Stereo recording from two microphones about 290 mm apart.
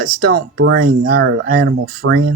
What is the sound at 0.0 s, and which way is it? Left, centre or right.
Speech, right.